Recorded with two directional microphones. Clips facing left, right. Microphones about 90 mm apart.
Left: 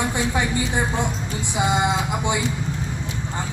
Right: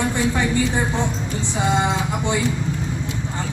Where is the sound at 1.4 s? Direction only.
10° left (ahead or behind).